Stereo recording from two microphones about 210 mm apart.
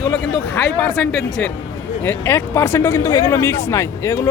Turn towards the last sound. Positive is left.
turn(degrees=10)  # may be behind; listen again after turning